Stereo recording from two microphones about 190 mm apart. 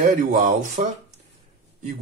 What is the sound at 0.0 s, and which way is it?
Speech, 40° right (ahead or behind).